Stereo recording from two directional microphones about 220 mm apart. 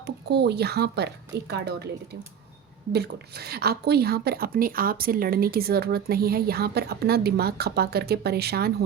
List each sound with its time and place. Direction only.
0.0 s a woman's voice: 50° right (ahead or behind)
2.9 s a woman's voice: 45° right (ahead or behind)